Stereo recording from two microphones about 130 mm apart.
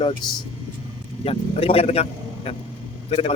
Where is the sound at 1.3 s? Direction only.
50° left (ahead or behind).